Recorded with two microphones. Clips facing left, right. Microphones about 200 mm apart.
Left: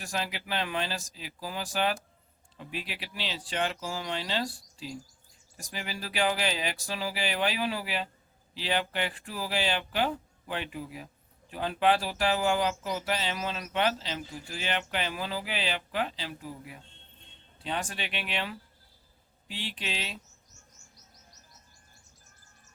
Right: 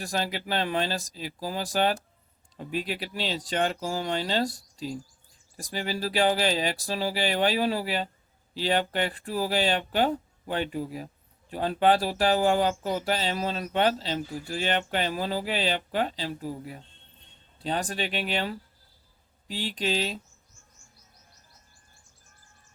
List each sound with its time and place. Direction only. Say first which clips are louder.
0.0 s speech: right 5 dB; 35° right (ahead or behind)
20.5 s chirp: left 1 dB; 45° left (ahead or behind)